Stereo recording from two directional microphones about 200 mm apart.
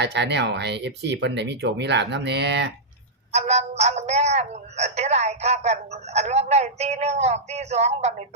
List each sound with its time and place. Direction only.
0.0 s speech: 60° right (ahead or behind)
3.3 s speech: 35° right (ahead or behind)